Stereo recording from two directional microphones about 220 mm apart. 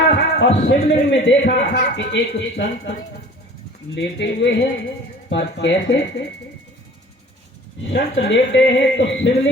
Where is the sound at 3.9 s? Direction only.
55° left (ahead or behind).